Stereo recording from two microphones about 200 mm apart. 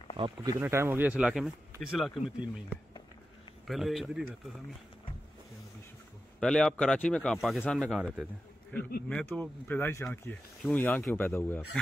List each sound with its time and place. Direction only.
0.2 s speech: 20° right (ahead or behind); by 4.2 s centre (ahead or behind)
6.4 s speech: 5° left (ahead or behind)